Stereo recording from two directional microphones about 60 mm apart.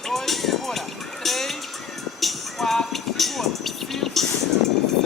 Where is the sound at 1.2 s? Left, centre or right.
Centre.